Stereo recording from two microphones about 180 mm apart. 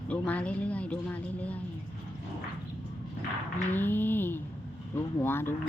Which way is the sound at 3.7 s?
10° left (ahead or behind).